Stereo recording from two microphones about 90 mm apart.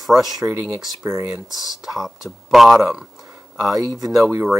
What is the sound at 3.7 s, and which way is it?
Speech, 40° right (ahead or behind).